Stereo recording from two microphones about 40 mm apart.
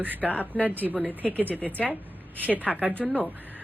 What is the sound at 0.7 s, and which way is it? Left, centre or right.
Speech, right.